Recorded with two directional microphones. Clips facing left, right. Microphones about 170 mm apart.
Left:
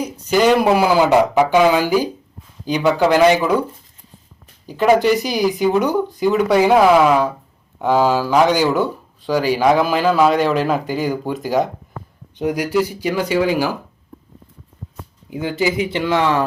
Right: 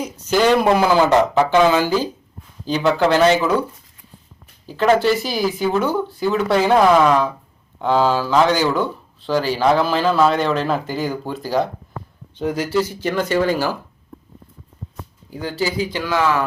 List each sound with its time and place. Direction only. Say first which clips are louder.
0.3 s speech: left 1 dB; 10° left (ahead or behind)
4.6 s speech: left 2 dB; 15° left (ahead or behind)
15.3 s speech: left 4 dB; 20° left (ahead or behind)